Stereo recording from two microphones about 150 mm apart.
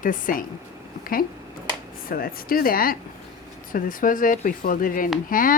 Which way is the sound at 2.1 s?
75° left (ahead or behind).